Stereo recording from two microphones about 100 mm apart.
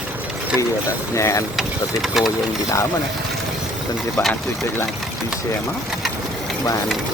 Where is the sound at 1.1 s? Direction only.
30° left (ahead or behind).